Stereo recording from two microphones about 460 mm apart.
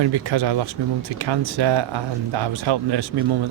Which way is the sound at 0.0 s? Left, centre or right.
Right.